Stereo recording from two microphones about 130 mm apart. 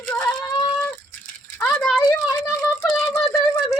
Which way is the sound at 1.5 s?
10° left (ahead or behind).